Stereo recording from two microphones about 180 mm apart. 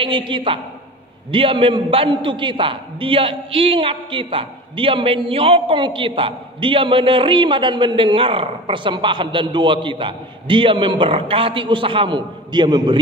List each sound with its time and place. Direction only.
0.0 s a man's voice: 25° right (ahead or behind)